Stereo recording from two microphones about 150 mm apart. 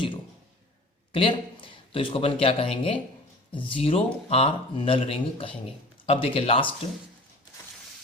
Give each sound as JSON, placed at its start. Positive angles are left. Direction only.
{"t": 1.1, "sound": "speech", "side_deg": 35}